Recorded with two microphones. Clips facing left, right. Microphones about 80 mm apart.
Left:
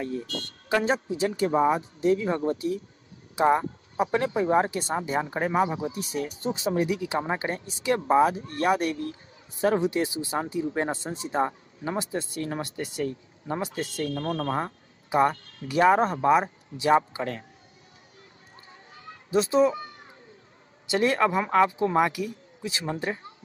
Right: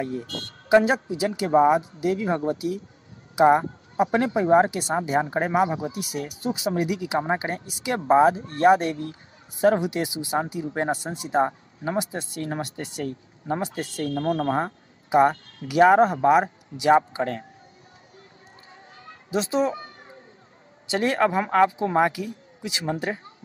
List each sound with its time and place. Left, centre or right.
0.7 s speech: centre
1.5 s speech: right
1.8 s speech: centre
7.2 s speech: right
8.1 s speech: right
17.2 s a man's voice: right
19.3 s speech: right
20.8 s speech: right